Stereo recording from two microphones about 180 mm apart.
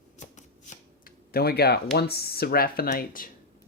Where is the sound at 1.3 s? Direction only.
60° left (ahead or behind).